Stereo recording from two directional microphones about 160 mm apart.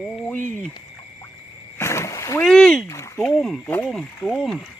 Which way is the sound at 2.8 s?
20° left (ahead or behind).